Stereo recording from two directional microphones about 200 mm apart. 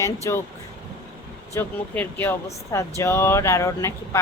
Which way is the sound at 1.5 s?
10° left (ahead or behind).